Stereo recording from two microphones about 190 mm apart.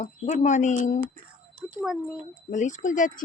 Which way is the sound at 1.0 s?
40° right (ahead or behind).